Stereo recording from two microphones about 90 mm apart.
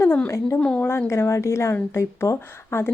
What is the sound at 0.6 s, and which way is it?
Speech, 15° left (ahead or behind).